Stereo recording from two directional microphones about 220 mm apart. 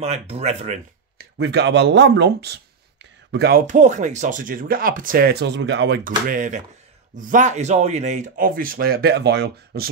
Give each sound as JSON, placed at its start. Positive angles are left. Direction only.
{"t": 0.0, "sound": "speech", "side_deg": -30}
{"t": 1.1, "sound": "speech", "side_deg": -50}